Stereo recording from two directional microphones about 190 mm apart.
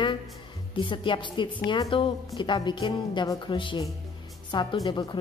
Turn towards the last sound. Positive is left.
turn(degrees=25)  # may be behind; listen again after turning